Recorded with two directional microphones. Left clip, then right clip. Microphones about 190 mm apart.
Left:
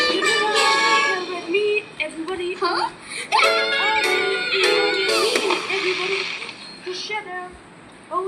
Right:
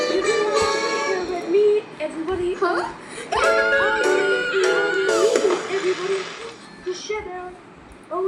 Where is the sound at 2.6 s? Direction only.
10° left (ahead or behind).